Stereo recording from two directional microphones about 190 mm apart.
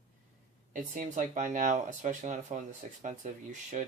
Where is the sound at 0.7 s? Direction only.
40° right (ahead or behind).